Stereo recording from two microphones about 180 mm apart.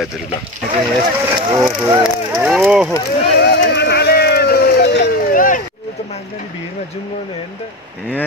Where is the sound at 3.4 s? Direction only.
65° left (ahead or behind).